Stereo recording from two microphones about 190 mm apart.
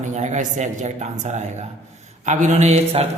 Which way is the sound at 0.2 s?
40° right (ahead or behind).